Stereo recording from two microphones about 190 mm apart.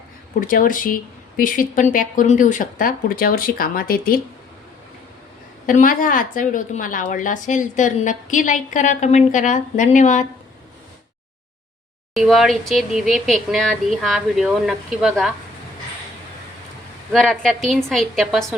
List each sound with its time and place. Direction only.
0.3 s speech: 45° left (ahead or behind)
5.6 s a woman's voice: 45° left (ahead or behind)
12.1 s speech: centre (ahead or behind)
17.1 s speech: centre (ahead or behind)